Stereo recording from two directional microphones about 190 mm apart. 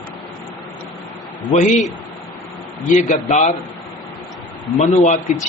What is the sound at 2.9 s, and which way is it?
Speech, 40° left (ahead or behind).